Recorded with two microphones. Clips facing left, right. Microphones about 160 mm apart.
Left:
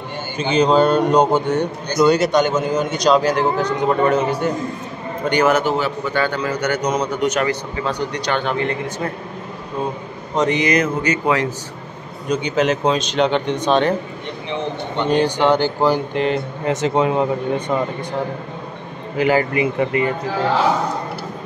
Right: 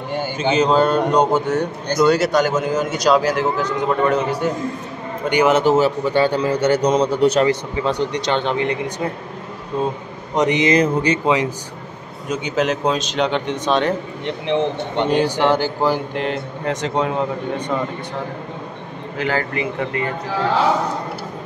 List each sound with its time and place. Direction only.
0.4 s a man's voice: 5° right (ahead or behind)
5.5 s a man's voice: 35° right (ahead or behind); by 9.1 s 15° right (ahead or behind)
10.3 s a man's voice: 20° right (ahead or behind)
12.3 s a man's voice: 5° right (ahead or behind)
15.0 s a man's voice: 5° right (ahead or behind)
19.1 s a man's voice: 10° left (ahead or behind)